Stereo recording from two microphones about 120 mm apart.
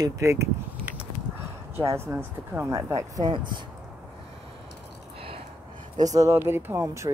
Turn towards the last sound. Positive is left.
turn(degrees=-25)  # may be behind; listen again after turning